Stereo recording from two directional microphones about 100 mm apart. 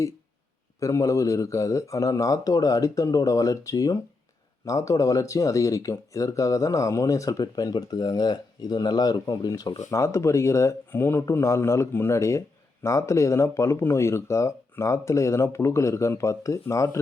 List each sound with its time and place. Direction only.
0.8 s speech: 30° left (ahead or behind)